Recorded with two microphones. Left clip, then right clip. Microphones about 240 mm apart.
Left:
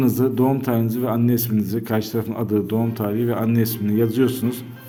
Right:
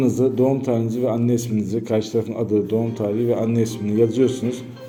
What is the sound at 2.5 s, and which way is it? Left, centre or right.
A man's voice, left.